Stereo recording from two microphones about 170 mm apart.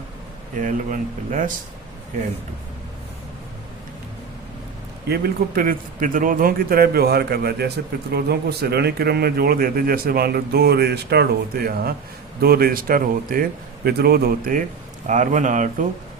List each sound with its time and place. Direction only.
0.5 s speech: 50° right (ahead or behind)
5.0 s a man's voice: 65° right (ahead or behind)
15.0 s speech: 45° right (ahead or behind)